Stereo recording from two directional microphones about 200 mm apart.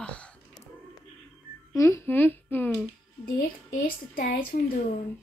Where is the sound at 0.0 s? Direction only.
5° left (ahead or behind).